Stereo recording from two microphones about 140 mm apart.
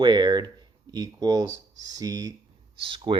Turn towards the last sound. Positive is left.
turn(degrees=-35)  # may be behind; listen again after turning